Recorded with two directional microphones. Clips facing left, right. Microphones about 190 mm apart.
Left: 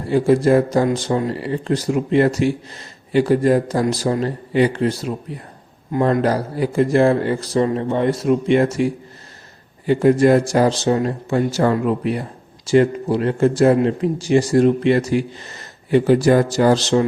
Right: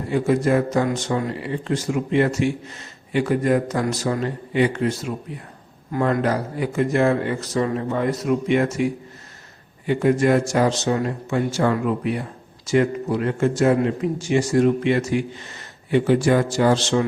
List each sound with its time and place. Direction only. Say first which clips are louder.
0.1 s speech: left 5 dB; 30° left (ahead or behind)